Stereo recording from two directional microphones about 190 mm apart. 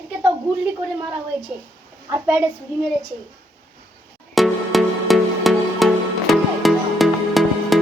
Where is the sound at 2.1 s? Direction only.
10° right (ahead or behind).